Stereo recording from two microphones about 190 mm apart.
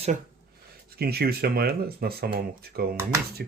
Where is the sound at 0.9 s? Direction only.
55° right (ahead or behind).